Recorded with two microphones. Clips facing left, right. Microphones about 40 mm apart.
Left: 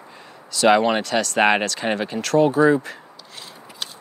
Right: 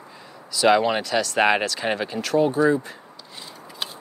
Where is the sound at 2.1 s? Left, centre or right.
Left.